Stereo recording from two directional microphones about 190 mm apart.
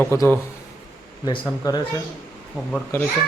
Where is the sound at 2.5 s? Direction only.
5° left (ahead or behind).